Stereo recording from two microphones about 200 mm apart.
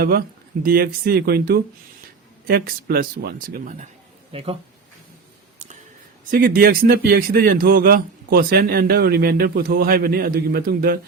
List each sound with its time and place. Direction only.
0.0 s a man's voice: 50° right (ahead or behind)
4.3 s speech: 30° right (ahead or behind)
5.5 s a sound: 35° right (ahead or behind)
6.3 s a man's voice: 45° right (ahead or behind)